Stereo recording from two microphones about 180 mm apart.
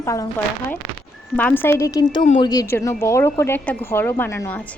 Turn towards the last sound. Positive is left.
turn(degrees=15)  # may be behind; listen again after turning